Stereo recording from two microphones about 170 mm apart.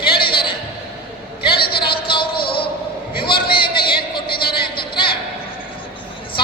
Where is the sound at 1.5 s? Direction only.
65° left (ahead or behind).